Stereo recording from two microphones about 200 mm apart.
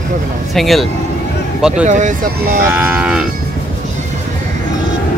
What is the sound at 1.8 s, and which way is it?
Speech, 40° right (ahead or behind).